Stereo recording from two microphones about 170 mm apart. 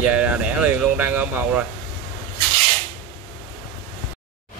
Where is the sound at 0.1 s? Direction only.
5° right (ahead or behind).